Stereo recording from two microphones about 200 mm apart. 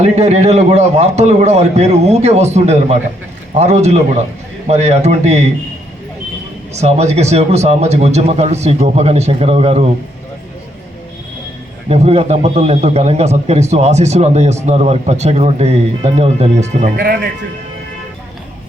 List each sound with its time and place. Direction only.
0.0 s a man's voice: 35° right (ahead or behind)
6.7 s a man's voice: 35° right (ahead or behind)
11.9 s a man's voice: 30° right (ahead or behind)